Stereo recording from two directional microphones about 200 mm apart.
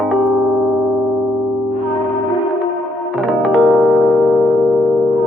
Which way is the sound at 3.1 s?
Centre (ahead or behind).